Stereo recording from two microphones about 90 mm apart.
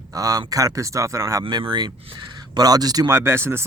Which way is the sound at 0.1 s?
40° right (ahead or behind).